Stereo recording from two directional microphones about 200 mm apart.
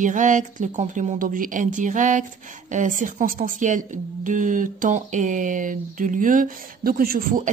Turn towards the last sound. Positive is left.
turn(degrees=-45)  # may be behind; listen again after turning